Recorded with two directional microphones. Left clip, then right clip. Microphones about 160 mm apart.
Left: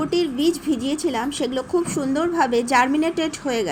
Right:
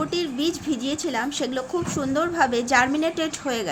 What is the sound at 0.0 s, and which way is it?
A woman's voice, centre (ahead or behind).